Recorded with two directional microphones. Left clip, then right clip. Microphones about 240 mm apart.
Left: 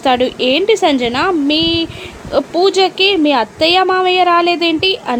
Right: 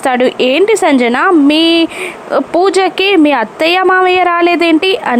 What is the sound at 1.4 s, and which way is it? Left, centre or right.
Speech, right.